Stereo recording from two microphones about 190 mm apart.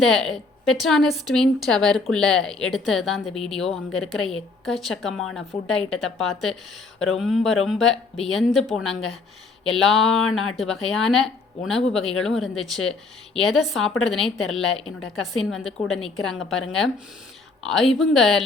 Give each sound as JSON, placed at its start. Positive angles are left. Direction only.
{"t": 0.0, "sound": "a woman's voice", "side_deg": 0}